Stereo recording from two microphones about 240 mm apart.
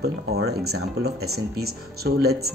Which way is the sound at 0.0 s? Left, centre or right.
Right.